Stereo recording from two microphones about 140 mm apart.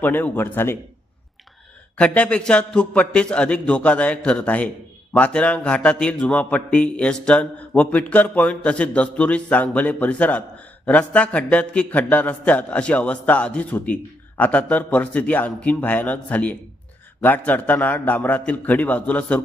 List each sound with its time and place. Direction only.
0.0 s a man's voice: 15° left (ahead or behind)
2.0 s a man's voice: 10° left (ahead or behind)